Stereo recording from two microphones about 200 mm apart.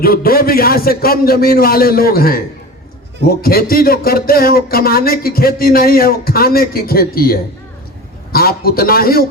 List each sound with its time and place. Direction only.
0.0 s speech: 50° left (ahead or behind)